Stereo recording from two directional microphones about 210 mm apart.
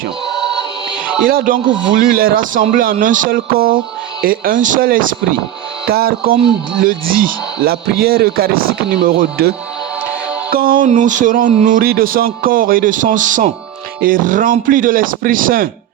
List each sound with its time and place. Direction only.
0.3 s choir: centre (ahead or behind)
1.2 s a man's voice: 45° right (ahead or behind)
10.5 s speech: 45° right (ahead or behind)